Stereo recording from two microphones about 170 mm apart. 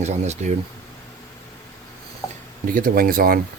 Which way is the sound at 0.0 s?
40° right (ahead or behind).